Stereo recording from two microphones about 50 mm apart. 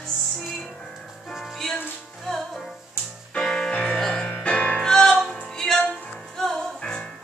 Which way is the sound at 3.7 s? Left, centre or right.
Left.